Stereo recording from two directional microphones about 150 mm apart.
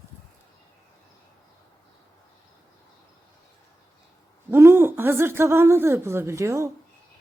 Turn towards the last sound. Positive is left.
turn(degrees=-20)  # may be behind; listen again after turning